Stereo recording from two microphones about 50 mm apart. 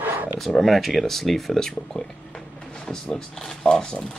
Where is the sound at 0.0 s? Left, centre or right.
Right.